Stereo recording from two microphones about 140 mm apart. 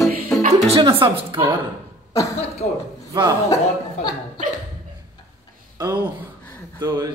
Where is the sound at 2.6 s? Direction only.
50° left (ahead or behind).